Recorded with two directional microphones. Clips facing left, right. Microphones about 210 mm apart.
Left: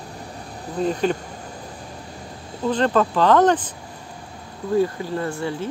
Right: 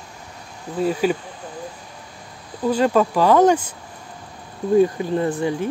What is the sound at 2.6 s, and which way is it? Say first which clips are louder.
Speech: right 2 dB; 10° right (ahead or behind).